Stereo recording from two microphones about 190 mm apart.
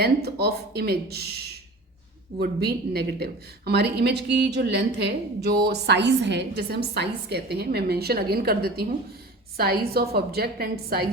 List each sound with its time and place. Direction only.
0.0 s a woman's voice: 55° right (ahead or behind)
2.4 s a woman's voice: 55° right (ahead or behind)